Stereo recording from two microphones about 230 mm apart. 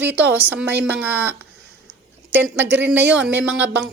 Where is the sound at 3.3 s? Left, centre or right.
Right.